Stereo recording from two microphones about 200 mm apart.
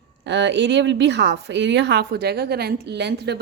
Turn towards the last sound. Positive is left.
turn(degrees=-55)  # may be behind; listen again after turning